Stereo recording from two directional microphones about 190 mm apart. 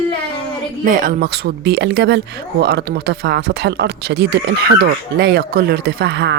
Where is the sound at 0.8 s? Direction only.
50° right (ahead or behind).